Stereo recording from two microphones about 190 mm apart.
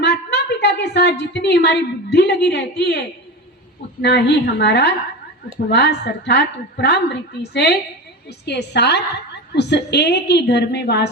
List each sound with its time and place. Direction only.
0.0 s a woman's voice: 60° left (ahead or behind)
4.0 s a woman's voice: 65° left (ahead or behind)